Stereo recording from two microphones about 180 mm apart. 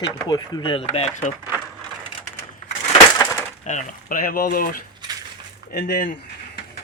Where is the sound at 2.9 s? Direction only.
20° left (ahead or behind).